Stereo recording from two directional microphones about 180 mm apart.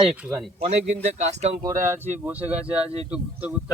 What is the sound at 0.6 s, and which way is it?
Speech, 40° right (ahead or behind).